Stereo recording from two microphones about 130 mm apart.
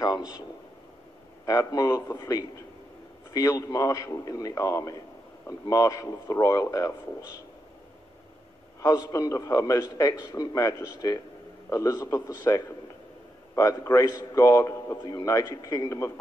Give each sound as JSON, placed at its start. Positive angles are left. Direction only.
{"t": 1.4, "sound": "a man's voice", "side_deg": 25}
{"t": 8.8, "sound": "a man's voice", "side_deg": 25}